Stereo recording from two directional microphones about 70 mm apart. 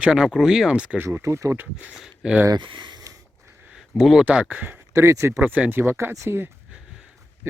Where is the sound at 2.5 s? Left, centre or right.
Right.